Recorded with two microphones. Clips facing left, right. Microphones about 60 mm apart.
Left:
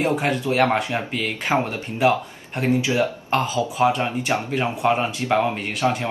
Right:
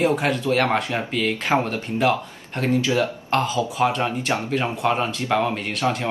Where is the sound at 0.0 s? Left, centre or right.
Centre.